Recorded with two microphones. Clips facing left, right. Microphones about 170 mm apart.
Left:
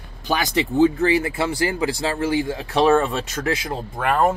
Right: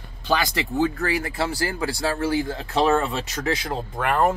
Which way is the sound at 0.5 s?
25° left (ahead or behind).